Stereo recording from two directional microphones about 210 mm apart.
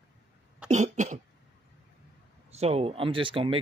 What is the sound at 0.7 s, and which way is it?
Cough, 35° right (ahead or behind).